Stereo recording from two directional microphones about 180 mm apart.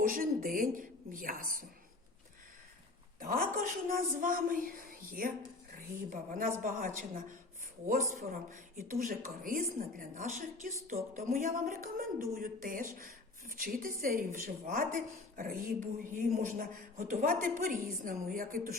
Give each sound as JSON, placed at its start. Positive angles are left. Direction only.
{"t": 0.0, "sound": "a woman's voice", "side_deg": -50}
{"t": 3.2, "sound": "a woman's voice", "side_deg": -50}